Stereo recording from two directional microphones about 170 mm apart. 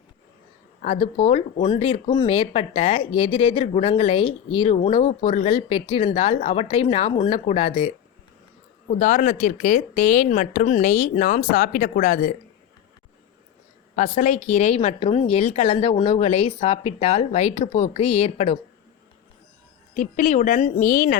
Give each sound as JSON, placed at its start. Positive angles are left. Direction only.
{"t": 0.9, "sound": "speech", "side_deg": 40}
{"t": 8.9, "sound": "a woman's voice", "side_deg": 45}
{"t": 13.9, "sound": "speech", "side_deg": 45}
{"t": 19.9, "sound": "a woman's voice", "side_deg": 50}